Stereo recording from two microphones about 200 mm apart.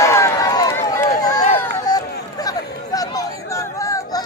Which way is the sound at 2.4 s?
20° left (ahead or behind).